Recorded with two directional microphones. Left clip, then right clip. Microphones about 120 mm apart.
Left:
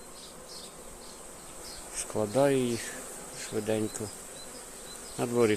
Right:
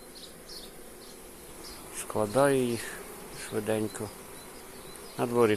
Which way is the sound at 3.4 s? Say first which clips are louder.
Even; 25° left (ahead or behind).